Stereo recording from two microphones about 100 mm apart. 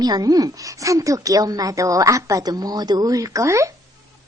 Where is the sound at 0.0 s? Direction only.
40° right (ahead or behind).